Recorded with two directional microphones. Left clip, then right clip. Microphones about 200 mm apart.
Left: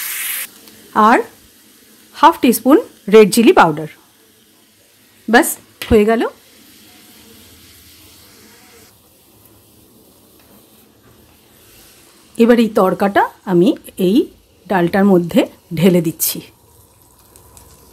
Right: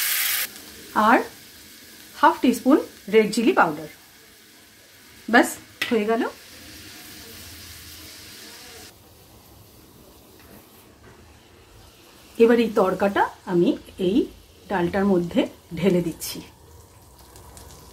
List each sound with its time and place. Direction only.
0.9 s speech: 50° left (ahead or behind)
5.3 s speech: 55° left (ahead or behind)
12.4 s speech: 45° left (ahead or behind)